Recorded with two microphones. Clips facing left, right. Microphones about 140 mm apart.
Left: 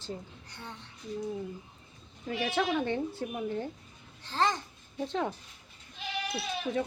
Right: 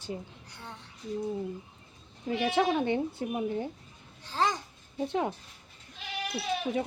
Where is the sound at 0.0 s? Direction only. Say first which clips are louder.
Right 2 dB; 10° right (ahead or behind).